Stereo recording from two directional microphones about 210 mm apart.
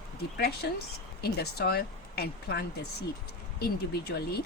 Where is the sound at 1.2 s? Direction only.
50° left (ahead or behind).